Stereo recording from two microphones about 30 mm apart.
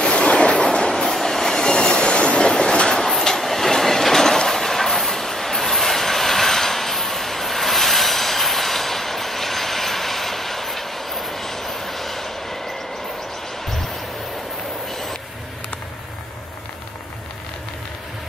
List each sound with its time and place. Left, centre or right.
0.1 s train: left
1.0 s train: centre; by 2.4 s left
2.4 s train: left
3.2 s train: centre
14.9 s vehicle: centre